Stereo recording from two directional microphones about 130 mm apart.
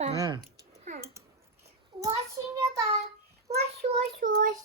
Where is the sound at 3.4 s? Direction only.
55° right (ahead or behind).